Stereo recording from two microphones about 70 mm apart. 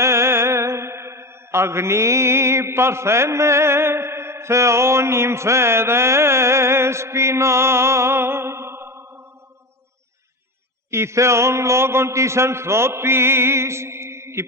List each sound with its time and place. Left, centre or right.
0.0 s mantra: right
10.9 s a man's voice: right